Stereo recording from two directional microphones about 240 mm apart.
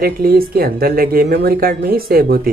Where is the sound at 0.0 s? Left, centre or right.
Right.